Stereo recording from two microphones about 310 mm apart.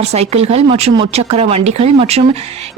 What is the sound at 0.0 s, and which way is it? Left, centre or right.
A woman's voice, centre.